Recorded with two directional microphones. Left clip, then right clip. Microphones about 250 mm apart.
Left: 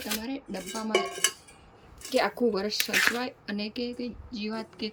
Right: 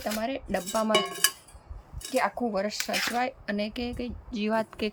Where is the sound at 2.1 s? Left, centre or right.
Centre.